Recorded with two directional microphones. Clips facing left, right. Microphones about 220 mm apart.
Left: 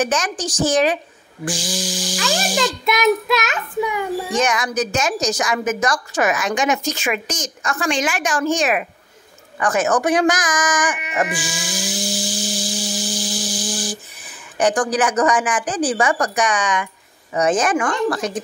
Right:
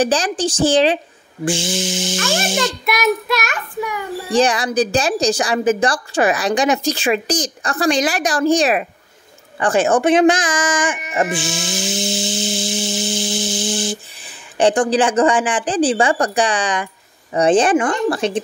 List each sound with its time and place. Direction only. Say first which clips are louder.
0.0 s speech: right 4 dB; 30° right (ahead or behind)
3.3 s child singing: left 2 dB; 20° left (ahead or behind)
4.3 s a woman's voice: right 8 dB; 35° right (ahead or behind)